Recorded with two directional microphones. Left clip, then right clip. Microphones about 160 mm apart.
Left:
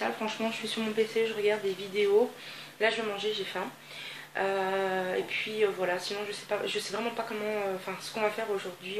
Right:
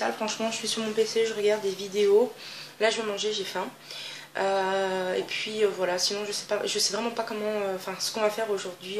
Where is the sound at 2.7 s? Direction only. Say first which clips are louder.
Right 3 dB; 20° right (ahead or behind).